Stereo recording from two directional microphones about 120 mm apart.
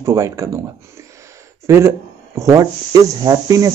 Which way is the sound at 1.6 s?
20° right (ahead or behind).